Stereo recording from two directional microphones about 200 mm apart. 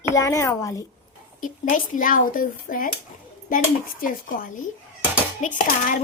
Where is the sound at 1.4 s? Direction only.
40° left (ahead or behind).